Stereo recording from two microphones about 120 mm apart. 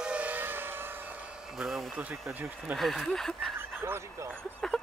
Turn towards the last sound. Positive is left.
turn(degrees=5)  # may be behind; listen again after turning